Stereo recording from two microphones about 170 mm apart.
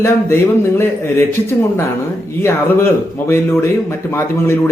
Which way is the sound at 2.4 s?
15° left (ahead or behind).